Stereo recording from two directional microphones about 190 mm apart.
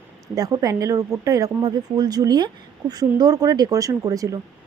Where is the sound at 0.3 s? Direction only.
20° right (ahead or behind).